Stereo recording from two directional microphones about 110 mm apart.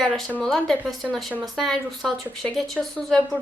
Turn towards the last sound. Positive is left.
turn(degrees=5)  # may be behind; listen again after turning